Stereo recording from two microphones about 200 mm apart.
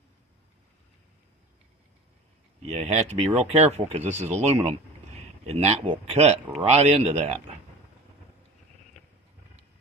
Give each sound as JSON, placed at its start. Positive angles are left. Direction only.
{"t": 2.7, "sound": "speech", "side_deg": -30}